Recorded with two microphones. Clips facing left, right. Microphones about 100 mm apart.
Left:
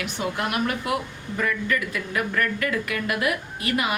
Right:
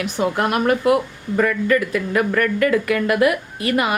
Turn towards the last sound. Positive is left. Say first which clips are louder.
# right 6 dB
turn(degrees=-50)  # may be behind; listen again after turning